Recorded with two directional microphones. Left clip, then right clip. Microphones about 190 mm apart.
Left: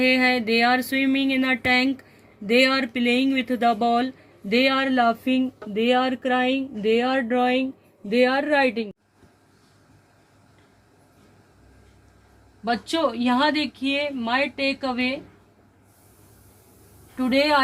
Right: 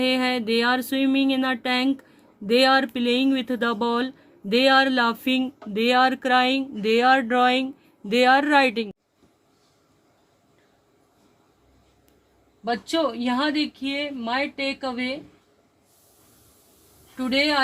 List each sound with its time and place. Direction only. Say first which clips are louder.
0.3 s a sound: left 2 dB; 50° right (ahead or behind)
2.5 s speech: right 1 dB; 55° right (ahead or behind)
12.6 s speech: left 1 dB; 20° right (ahead or behind)
17.2 s a woman's voice: left 2 dB; 20° right (ahead or behind)